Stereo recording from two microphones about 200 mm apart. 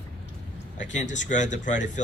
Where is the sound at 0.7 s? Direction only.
40° left (ahead or behind).